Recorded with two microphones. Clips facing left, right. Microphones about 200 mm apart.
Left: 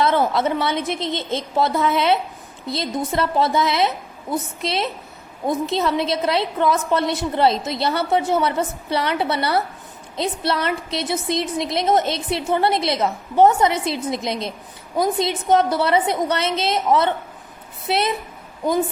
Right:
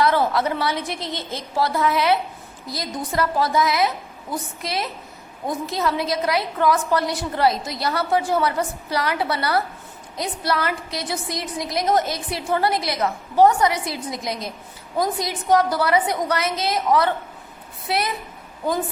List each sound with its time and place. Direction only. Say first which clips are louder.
0.0 s a woman's voice: left 1 dB; 20° left (ahead or behind)